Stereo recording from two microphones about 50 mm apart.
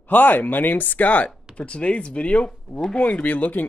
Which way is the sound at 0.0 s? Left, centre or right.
Left.